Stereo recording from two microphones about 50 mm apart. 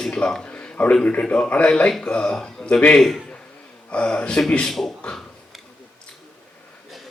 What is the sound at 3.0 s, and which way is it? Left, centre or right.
Speech, centre.